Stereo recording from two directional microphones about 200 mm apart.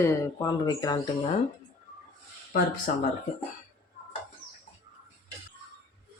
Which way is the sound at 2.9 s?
45° left (ahead or behind).